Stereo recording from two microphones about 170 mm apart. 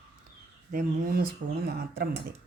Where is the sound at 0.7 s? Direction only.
55° right (ahead or behind).